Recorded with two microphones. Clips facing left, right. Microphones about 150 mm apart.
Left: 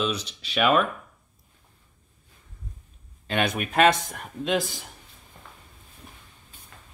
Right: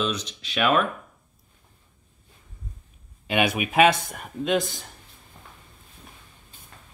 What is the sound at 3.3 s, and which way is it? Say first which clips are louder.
Speech: right 2 dB; 10° right (ahead or behind).